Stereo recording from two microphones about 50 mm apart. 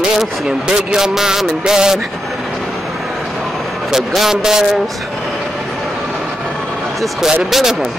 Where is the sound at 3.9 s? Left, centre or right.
Centre.